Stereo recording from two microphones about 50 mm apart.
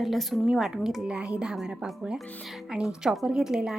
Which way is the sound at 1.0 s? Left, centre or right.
Centre.